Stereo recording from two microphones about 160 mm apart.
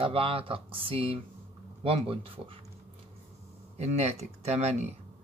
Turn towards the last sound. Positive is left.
turn(degrees=-45)  # may be behind; listen again after turning